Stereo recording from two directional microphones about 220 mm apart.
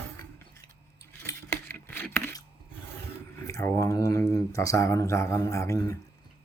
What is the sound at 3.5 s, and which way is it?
Speech, 15° left (ahead or behind).